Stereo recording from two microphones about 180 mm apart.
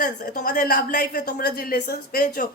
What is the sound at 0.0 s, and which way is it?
A woman's voice, 45° left (ahead or behind).